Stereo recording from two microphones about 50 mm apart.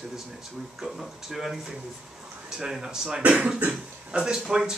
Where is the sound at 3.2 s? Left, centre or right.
Right.